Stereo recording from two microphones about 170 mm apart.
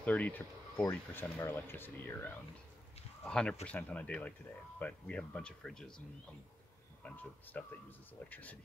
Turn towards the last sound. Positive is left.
turn(degrees=10)  # may be behind; listen again after turning